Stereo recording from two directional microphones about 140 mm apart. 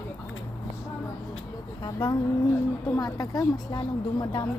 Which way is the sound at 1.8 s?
35° left (ahead or behind).